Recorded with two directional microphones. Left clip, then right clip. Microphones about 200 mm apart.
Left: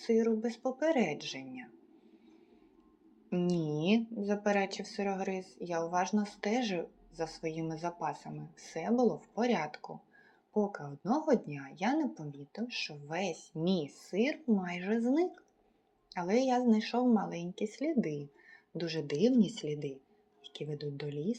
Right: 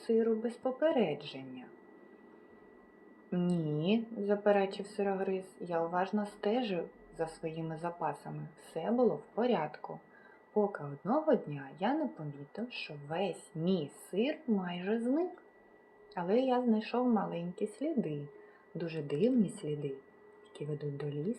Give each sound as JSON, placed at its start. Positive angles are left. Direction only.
{"t": 0.1, "sound": "a woman's voice", "side_deg": 20}
{"t": 3.2, "sound": "a woman's voice", "side_deg": 20}